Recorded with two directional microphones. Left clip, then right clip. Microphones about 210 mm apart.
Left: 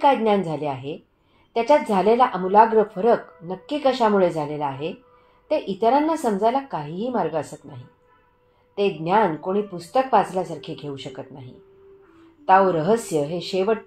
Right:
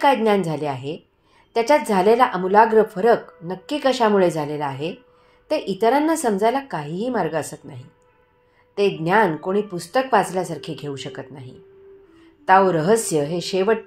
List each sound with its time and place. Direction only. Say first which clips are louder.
0.0 s speech: right 1 dB; 30° right (ahead or behind)